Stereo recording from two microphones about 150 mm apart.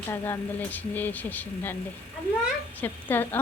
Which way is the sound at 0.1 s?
15° left (ahead or behind).